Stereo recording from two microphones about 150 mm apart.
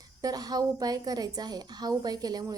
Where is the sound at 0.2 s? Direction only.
25° right (ahead or behind).